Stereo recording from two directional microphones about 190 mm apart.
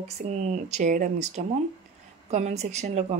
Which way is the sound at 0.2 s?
45° right (ahead or behind).